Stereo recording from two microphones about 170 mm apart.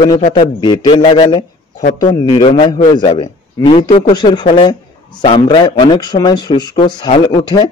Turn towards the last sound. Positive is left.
turn(degrees=30)  # may be behind; listen again after turning